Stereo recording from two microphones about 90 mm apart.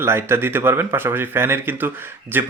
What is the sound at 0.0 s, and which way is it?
Speech, 25° right (ahead or behind).